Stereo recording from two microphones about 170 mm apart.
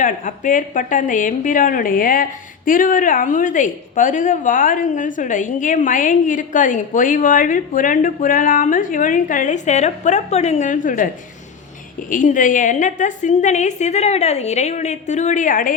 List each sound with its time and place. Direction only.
0.0 s a woman's voice: 50° left (ahead or behind)
12.1 s a woman's voice: 50° left (ahead or behind)